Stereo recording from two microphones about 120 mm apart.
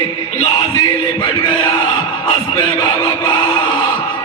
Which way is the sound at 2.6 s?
40° left (ahead or behind).